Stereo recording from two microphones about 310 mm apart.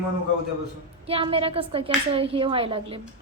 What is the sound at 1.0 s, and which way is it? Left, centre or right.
A woman's voice, centre.